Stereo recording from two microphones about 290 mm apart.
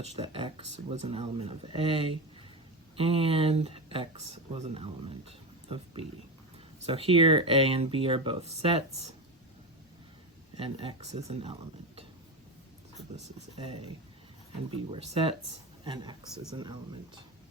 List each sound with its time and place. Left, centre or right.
0.0 s speech: right
10.6 s speech: centre
13.6 s speech: centre